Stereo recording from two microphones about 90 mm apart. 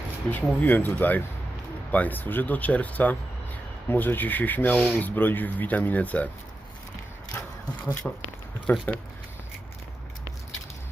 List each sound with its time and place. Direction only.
0.3 s speech: 20° left (ahead or behind)
8.0 s speech: centre (ahead or behind)
8.7 s speech: 25° left (ahead or behind)